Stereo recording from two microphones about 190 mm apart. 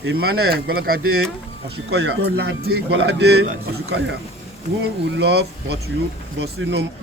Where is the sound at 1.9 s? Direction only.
60° right (ahead or behind).